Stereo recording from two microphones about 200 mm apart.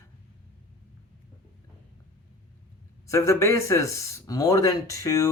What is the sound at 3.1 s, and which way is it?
Speech, 15° left (ahead or behind).